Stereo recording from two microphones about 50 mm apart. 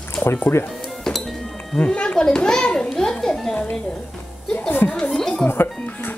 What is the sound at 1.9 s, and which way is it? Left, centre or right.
Children playing, left.